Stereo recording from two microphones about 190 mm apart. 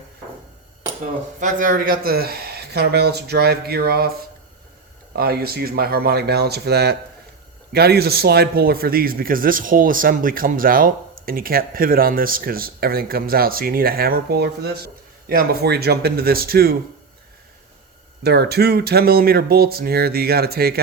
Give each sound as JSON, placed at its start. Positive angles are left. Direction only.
{"t": 1.0, "sound": "speech", "side_deg": -40}
{"t": 5.1, "sound": "speech", "side_deg": -55}
{"t": 18.2, "sound": "speech", "side_deg": -60}